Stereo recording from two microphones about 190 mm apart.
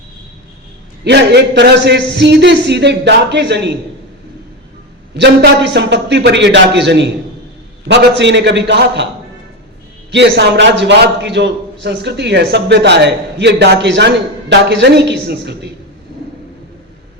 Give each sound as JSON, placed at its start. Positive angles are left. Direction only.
{"t": 1.0, "sound": "a man's voice", "side_deg": -60}
{"t": 5.1, "sound": "a man's voice", "side_deg": -65}
{"t": 10.1, "sound": "a man's voice", "side_deg": -65}